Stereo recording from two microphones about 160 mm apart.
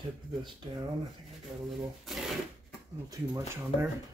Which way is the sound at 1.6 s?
Centre (ahead or behind).